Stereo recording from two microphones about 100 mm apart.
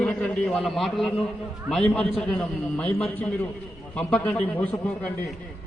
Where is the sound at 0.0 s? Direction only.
10° left (ahead or behind).